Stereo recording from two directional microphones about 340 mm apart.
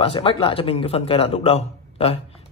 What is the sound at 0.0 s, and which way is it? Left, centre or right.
Speech, centre.